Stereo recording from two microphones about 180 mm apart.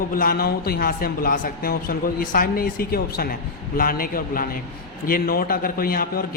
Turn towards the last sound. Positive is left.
turn(degrees=55)  # may be behind; listen again after turning